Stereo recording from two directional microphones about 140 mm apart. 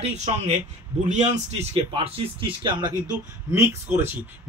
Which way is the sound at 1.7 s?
40° right (ahead or behind).